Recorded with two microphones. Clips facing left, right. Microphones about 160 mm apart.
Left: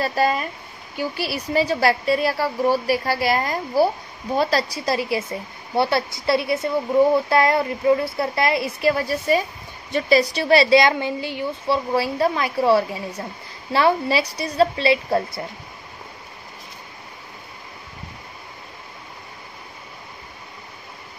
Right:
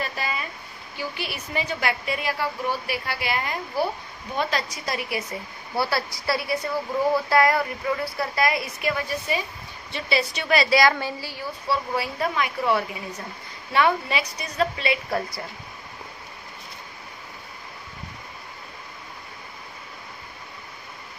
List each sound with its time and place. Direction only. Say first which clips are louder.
0.0 s a woman's voice: left 9 dB; 40° left (ahead or behind)